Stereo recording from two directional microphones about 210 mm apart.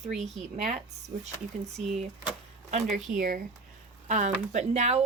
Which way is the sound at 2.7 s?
35° right (ahead or behind).